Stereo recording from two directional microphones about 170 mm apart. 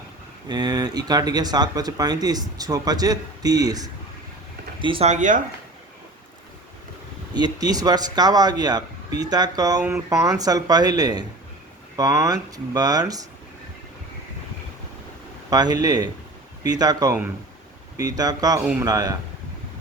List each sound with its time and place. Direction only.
0.4 s speech: 25° right (ahead or behind); by 5.4 s 45° right (ahead or behind)
7.3 s speech: 25° right (ahead or behind)
15.4 s speech: 25° right (ahead or behind)
18.6 s speech: 5° right (ahead or behind)
18.9 s speech: 20° right (ahead or behind)